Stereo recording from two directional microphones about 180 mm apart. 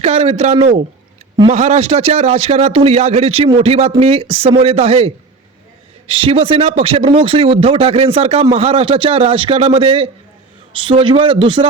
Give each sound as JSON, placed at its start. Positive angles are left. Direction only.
{"t": 0.0, "sound": "a man's voice", "side_deg": -35}